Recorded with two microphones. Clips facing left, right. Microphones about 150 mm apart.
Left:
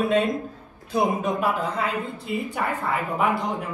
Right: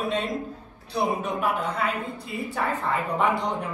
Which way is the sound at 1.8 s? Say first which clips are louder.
Left 1 dB; 30° left (ahead or behind).